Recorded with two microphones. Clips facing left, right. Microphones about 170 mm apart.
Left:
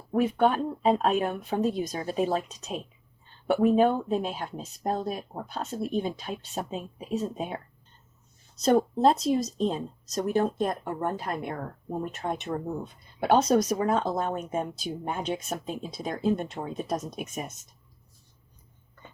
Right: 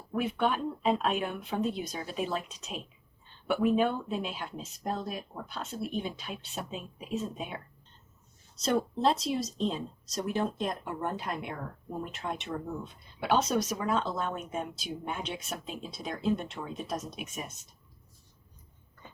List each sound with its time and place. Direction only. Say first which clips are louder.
0.1 s speech: left 6 dB; 40° left (ahead or behind)
8.6 s speech: left 6 dB; 45° left (ahead or behind)